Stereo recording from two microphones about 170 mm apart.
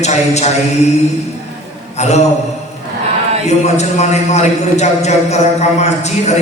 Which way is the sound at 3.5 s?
40° left (ahead or behind).